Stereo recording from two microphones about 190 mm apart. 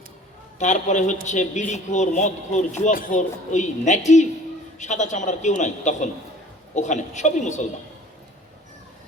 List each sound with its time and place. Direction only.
0.6 s a man's voice: 40° left (ahead or behind)